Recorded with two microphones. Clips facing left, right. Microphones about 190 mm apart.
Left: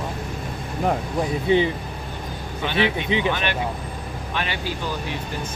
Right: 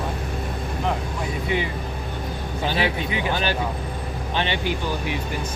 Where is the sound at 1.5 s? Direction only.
30° left (ahead or behind).